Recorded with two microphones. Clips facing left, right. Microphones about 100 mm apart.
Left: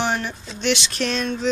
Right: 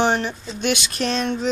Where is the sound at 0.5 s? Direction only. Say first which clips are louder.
Left 1 dB; 45° right (ahead or behind).